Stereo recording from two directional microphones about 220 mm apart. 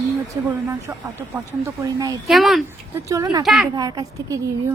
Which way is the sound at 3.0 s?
15° right (ahead or behind).